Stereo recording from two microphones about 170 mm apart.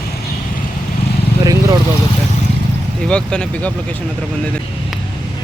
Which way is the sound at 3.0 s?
5° left (ahead or behind).